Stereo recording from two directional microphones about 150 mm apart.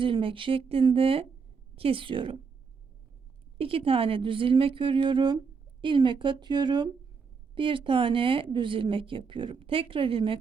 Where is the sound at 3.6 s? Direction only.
40° right (ahead or behind).